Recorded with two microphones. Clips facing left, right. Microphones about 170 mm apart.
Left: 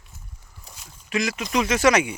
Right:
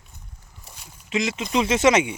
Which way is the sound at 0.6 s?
5° right (ahead or behind).